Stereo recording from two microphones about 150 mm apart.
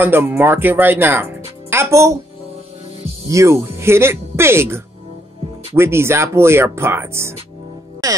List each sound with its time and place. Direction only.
0.0 s speech: 15° right (ahead or behind)
3.3 s speech: 20° right (ahead or behind)
8.0 s music: 25° right (ahead or behind)